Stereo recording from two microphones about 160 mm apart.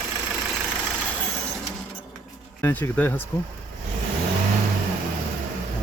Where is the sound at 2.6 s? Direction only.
15° left (ahead or behind).